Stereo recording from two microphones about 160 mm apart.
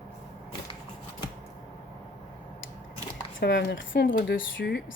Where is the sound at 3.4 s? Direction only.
90° left.